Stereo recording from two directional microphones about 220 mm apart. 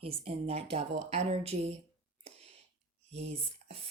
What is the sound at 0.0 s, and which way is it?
Speech, 25° right (ahead or behind).